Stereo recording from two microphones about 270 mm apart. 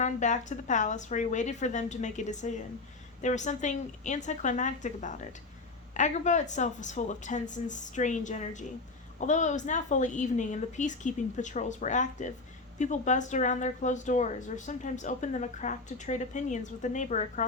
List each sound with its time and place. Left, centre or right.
0.0 s speech: left